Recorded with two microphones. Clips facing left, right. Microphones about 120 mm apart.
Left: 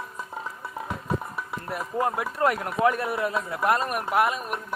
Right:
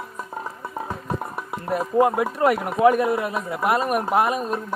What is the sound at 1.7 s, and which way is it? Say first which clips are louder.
Speech: right 8 dB; 25° right (ahead or behind).